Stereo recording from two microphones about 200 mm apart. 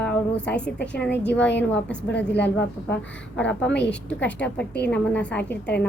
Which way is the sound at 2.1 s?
60° left (ahead or behind).